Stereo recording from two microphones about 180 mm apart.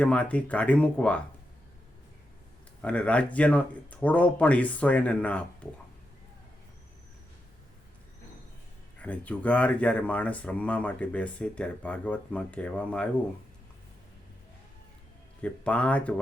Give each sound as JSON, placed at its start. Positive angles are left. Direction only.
{"t": 0.0, "sound": "speech", "side_deg": 5}
{"t": 2.8, "sound": "speech", "side_deg": 5}
{"t": 9.0, "sound": "speech", "side_deg": 10}
{"t": 15.4, "sound": "speech", "side_deg": 5}